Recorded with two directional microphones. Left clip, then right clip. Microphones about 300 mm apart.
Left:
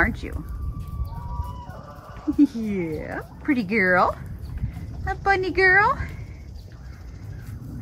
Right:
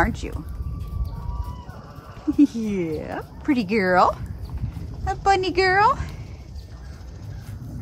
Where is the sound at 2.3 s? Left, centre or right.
Centre.